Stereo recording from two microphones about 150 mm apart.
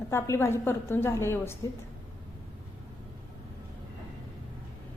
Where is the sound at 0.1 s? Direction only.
15° left (ahead or behind).